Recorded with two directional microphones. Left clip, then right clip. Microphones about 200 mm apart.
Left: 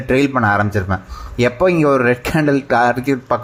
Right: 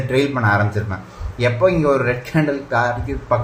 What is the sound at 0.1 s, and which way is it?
Speech, 40° left (ahead or behind).